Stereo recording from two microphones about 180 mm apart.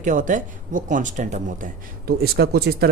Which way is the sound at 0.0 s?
45° right (ahead or behind).